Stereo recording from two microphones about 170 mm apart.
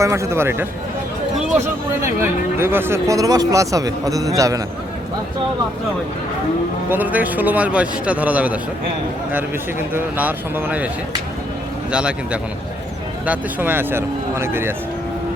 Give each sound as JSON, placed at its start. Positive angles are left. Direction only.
{"t": 0.0, "sound": "a man's voice", "side_deg": -15}
{"t": 2.2, "sound": "speech", "side_deg": -15}
{"t": 6.9, "sound": "a man's voice", "side_deg": -10}
{"t": 9.9, "sound": "a man's voice", "side_deg": -10}
{"t": 11.9, "sound": "a man's voice", "side_deg": -5}